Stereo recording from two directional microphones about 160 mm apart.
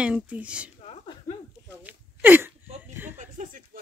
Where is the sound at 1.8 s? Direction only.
10° right (ahead or behind).